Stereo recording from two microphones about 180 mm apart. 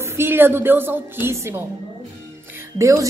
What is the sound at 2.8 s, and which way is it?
Speech, 15° right (ahead or behind).